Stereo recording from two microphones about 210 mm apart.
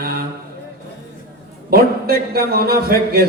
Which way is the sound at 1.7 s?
45° right (ahead or behind).